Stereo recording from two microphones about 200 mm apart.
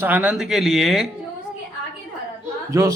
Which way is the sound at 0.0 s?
10° right (ahead or behind).